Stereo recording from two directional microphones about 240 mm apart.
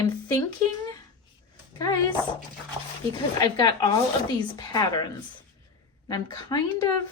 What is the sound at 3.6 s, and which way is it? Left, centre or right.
Speech, centre.